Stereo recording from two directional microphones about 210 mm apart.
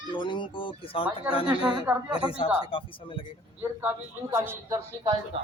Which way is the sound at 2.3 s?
25° left (ahead or behind).